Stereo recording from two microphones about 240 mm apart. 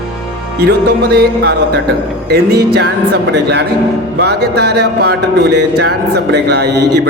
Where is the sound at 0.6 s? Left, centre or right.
Right.